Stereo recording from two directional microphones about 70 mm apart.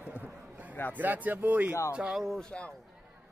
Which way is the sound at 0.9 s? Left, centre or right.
Right.